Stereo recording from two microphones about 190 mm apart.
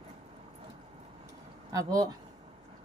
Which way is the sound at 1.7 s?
20° right (ahead or behind).